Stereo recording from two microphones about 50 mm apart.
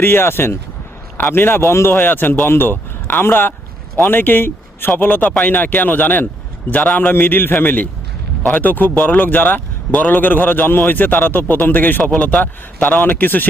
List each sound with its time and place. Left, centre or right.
0.0 s speech: left